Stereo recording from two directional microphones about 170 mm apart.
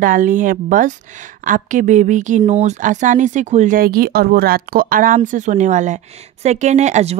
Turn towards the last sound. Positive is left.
turn(degrees=-40)  # may be behind; listen again after turning